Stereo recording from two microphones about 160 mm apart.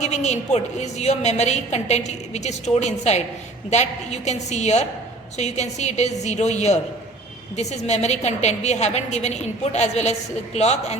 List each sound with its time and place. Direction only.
0.0 s a woman's voice: 45° left (ahead or behind)